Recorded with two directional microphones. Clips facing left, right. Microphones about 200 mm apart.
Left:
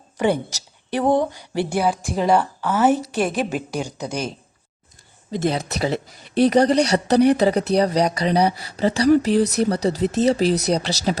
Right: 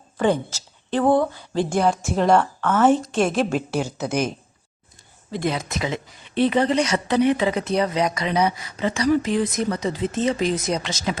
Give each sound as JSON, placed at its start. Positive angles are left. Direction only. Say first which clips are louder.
{"t": 0.2, "sound": "a woman's voice", "louder": "even", "side_deg": 10}
{"t": 5.3, "sound": "speech", "louder": "left 2 dB", "side_deg": 40}